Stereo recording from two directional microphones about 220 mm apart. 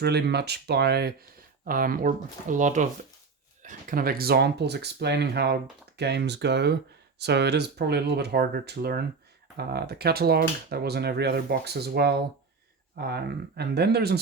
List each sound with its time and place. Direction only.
0.0 s speech: 50° right (ahead or behind)